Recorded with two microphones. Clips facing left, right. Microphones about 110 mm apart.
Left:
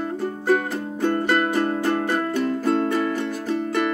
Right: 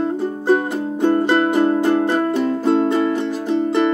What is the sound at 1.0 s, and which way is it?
Music, 20° right (ahead or behind).